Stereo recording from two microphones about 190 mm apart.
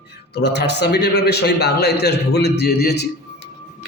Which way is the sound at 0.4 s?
60° left (ahead or behind).